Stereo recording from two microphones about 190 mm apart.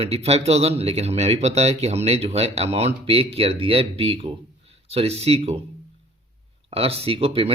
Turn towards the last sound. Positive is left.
turn(degrees=-30)  # may be behind; listen again after turning